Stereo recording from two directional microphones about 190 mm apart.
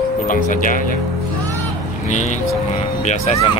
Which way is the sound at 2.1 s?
40° left (ahead or behind).